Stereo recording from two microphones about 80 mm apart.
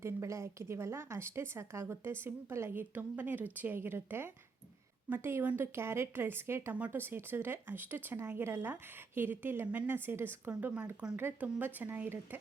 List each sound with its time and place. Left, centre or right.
0.0 s a woman's voice: right
6.7 s speech: centre